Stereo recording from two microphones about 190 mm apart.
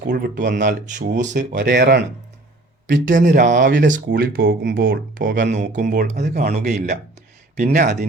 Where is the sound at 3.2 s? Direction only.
45° right (ahead or behind).